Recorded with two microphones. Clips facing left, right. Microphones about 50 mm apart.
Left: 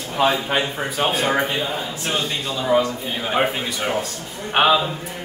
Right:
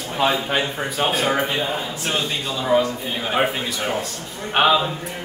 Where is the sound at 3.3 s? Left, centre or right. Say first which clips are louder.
Even; centre.